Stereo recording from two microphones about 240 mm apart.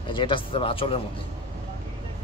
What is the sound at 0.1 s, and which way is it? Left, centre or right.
Speech, left.